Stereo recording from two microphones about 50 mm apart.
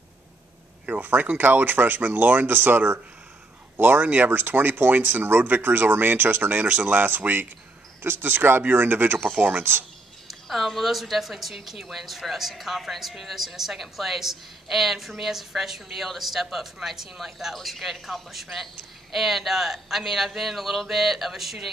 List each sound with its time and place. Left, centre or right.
0.8 s speech: right
10.2 s a woman's voice: centre